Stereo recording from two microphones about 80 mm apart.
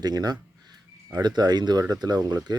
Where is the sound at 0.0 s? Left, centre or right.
Right.